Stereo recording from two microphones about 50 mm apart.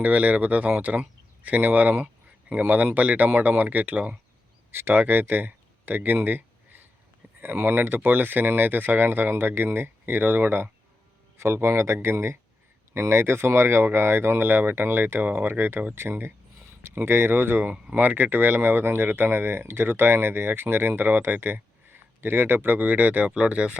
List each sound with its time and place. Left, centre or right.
0.0 s speech: right
4.7 s speech: right
5.3 s a sound: right
7.4 s speech: right
11.3 s speech: right
23.3 s speech: right